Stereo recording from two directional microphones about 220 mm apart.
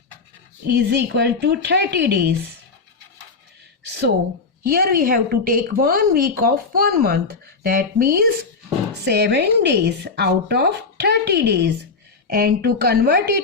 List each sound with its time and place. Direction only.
0.7 s a woman's voice: 50° right (ahead or behind)
4.6 s a woman's voice: 45° right (ahead or behind)